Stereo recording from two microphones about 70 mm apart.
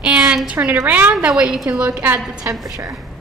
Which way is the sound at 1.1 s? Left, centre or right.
Centre.